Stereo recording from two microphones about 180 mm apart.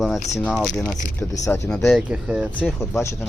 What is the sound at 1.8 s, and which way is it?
Speech, centre (ahead or behind).